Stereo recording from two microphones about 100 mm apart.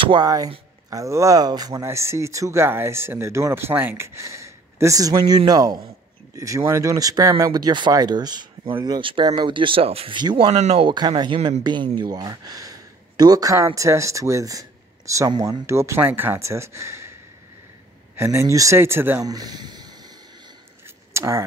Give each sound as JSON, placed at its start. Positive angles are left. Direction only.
{"t": 0.0, "sound": "speech", "side_deg": -50}
{"t": 0.8, "sound": "speech", "side_deg": -35}
{"t": 10.1, "sound": "speech", "side_deg": -50}
{"t": 10.5, "sound": "speech", "side_deg": -80}
{"t": 10.9, "sound": "speech", "side_deg": -45}
{"t": 11.3, "sound": "speech", "side_deg": -70}
{"t": 11.6, "sound": "speech", "side_deg": -50}
{"t": 15.6, "sound": "speech", "side_deg": -25}
{"t": 18.1, "sound": "speech", "side_deg": -25}
{"t": 19.2, "sound": "a sound", "side_deg": -40}
{"t": 21.1, "sound": "speech", "side_deg": -30}